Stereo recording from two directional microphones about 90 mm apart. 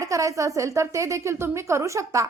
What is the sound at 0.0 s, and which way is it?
A woman's voice, 40° right (ahead or behind).